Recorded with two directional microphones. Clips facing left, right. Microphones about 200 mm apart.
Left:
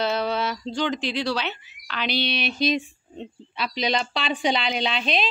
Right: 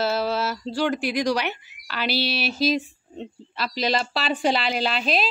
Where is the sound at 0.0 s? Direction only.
5° right (ahead or behind).